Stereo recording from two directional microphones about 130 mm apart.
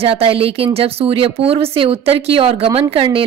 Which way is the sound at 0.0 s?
50° right (ahead or behind).